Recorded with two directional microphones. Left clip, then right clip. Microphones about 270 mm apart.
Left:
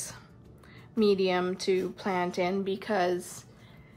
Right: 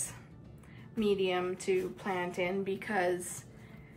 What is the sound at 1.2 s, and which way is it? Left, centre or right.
A woman's voice, centre.